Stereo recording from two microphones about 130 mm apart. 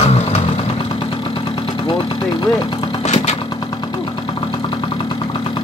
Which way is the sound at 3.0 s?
60° left (ahead or behind).